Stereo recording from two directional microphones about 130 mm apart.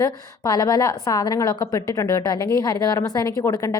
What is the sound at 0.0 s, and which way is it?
A woman's voice, 30° left (ahead or behind).